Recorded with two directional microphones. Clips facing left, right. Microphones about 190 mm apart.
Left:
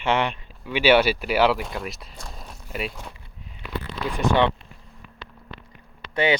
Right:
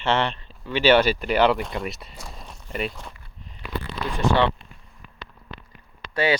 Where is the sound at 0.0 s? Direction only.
10° left (ahead or behind).